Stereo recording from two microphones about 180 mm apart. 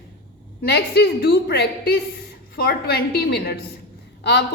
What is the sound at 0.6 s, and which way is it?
A woman's voice, 65° left (ahead or behind).